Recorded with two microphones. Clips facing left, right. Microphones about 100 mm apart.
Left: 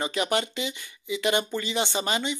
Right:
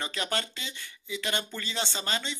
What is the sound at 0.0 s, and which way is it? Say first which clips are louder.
Speech: left 6 dB; 15° left (ahead or behind).